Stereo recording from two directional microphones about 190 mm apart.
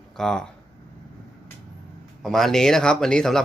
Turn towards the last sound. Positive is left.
turn(degrees=5)  # may be behind; listen again after turning